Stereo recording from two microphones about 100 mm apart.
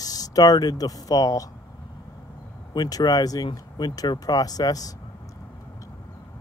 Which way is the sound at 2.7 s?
40° left (ahead or behind).